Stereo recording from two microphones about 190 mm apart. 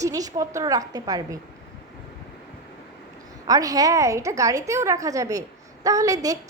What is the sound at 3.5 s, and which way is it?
A woman's voice, 20° right (ahead or behind).